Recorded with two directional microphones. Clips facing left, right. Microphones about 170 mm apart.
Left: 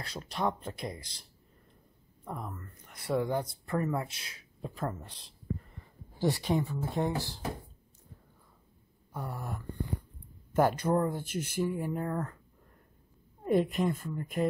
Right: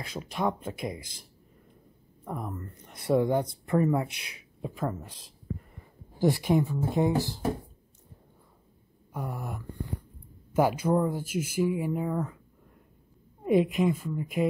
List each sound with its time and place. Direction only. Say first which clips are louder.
0.0 s speech: right 3 dB; 10° right (ahead or behind)
2.2 s speech: right 4 dB; 10° right (ahead or behind)
2.6 s speech: right 7 dB; 25° right (ahead or behind)
6.1 s speech: right 5 dB; 10° right (ahead or behind)
9.1 s speech: right 3 dB; 10° right (ahead or behind)
13.4 s speech: right 4 dB; 5° right (ahead or behind)